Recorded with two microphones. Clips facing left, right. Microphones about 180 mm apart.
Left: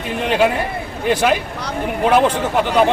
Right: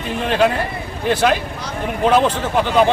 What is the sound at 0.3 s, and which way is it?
Speech, 10° left (ahead or behind).